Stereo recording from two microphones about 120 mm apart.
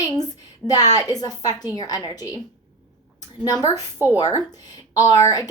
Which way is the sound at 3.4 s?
30° left (ahead or behind).